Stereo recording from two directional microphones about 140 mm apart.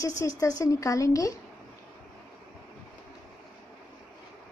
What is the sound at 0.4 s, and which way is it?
A woman's voice, 25° left (ahead or behind).